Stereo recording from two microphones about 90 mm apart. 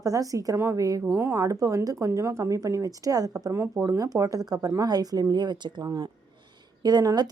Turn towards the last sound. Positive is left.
turn(degrees=-45)  # may be behind; listen again after turning